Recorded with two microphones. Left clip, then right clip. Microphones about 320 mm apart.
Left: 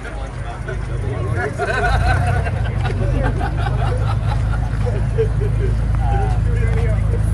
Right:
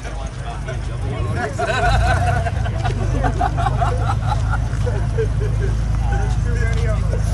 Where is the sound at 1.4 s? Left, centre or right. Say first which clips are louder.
Even; right.